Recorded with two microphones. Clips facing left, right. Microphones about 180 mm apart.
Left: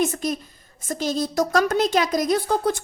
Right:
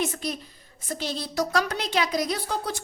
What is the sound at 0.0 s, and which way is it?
A woman's voice, 45° left (ahead or behind).